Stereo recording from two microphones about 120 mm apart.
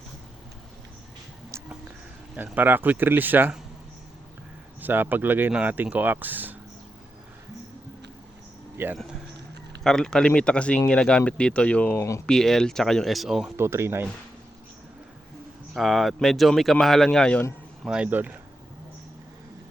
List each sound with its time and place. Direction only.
2.3 s speech: 15° right (ahead or behind)
4.8 s speech: 15° right (ahead or behind)
8.8 s speech: 20° right (ahead or behind)
9.8 s speech: 5° left (ahead or behind)
11.9 s speech: 25° left (ahead or behind)
12.2 s speech: 5° left (ahead or behind)
13.6 s speech: 20° right (ahead or behind)
15.7 s speech: centre (ahead or behind)
17.8 s speech: 10° right (ahead or behind)